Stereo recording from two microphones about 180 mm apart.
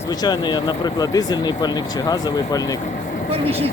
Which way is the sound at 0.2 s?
25° left (ahead or behind).